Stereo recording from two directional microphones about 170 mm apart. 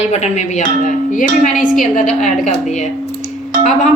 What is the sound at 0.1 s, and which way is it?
A woman's voice, 40° left (ahead or behind).